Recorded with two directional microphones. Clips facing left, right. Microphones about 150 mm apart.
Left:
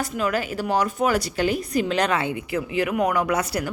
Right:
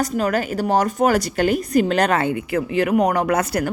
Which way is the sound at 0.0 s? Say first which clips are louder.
Right 4 dB; 40° right (ahead or behind).